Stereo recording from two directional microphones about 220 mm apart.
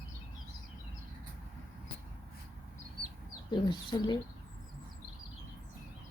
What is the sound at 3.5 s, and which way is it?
Speech, 20° left (ahead or behind).